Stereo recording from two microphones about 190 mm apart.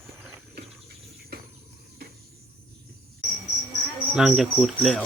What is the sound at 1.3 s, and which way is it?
Cricket, 60° right (ahead or behind).